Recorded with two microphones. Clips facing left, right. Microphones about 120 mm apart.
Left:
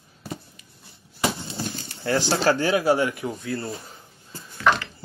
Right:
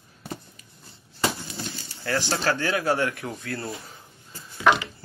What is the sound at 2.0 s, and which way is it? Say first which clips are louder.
Speech: left 4 dB; 25° left (ahead or behind).